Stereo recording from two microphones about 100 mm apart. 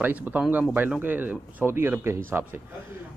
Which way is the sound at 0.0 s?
15° right (ahead or behind).